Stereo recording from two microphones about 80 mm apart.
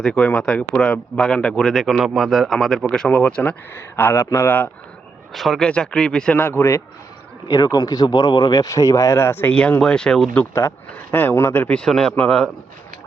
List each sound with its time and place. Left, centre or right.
0.0 s speech: centre
1.7 s speech: centre
3.1 s speech: centre
3.8 s speech: left
5.3 s speech: centre
5.6 s speech: centre
6.3 s speech: left
7.5 s speech: left
9.5 s speech: centre
11.1 s speech: left
11.8 s speech: centre